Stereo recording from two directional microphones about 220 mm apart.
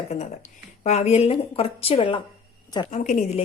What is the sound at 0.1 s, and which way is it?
A woman's voice, 30° left (ahead or behind).